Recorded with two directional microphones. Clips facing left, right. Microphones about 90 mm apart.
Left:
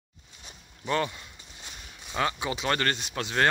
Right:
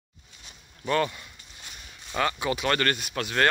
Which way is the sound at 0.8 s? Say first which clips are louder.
Right 3 dB; 10° left (ahead or behind).